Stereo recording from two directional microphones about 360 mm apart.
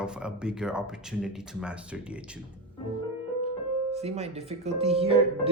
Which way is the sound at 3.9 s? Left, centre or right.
Centre.